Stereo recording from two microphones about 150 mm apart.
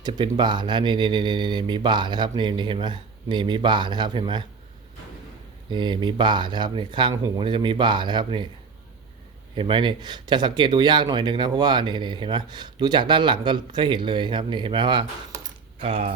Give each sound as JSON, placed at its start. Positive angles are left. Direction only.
{"t": 0.0, "sound": "speech", "side_deg": -30}
{"t": 5.7, "sound": "speech", "side_deg": -30}
{"t": 9.6, "sound": "speech", "side_deg": -35}
{"t": 15.8, "sound": "speech", "side_deg": -40}